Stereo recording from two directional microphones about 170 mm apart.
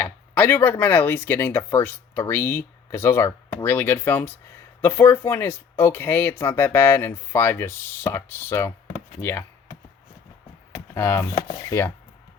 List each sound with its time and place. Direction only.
0.0 s speech: 10° left (ahead or behind)
10.8 s speech: 15° left (ahead or behind)